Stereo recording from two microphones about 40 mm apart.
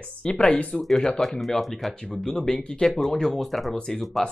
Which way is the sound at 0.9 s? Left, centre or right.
Centre.